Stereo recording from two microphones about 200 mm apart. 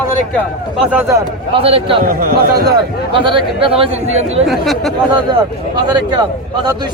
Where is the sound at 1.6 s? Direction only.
25° right (ahead or behind).